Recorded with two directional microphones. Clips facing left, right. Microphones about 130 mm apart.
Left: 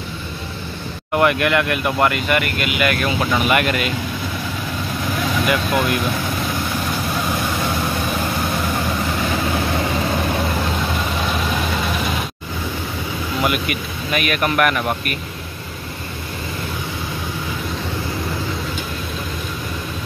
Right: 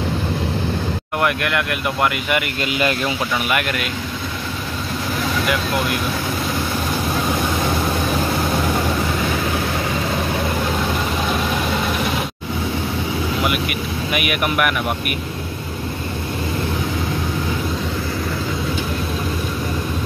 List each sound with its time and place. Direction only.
1.1 s speech: centre (ahead or behind)
2.2 s speech: 15° right (ahead or behind)
2.6 s speech: 30° right (ahead or behind)
3.4 s speech: centre (ahead or behind)
13.4 s speech: 5° right (ahead or behind)